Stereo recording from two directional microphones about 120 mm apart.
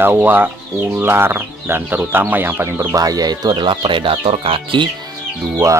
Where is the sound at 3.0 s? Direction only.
30° right (ahead or behind); by 4.9 s 45° right (ahead or behind).